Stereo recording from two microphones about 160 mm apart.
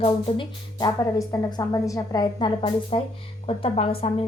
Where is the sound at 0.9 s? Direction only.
20° left (ahead or behind).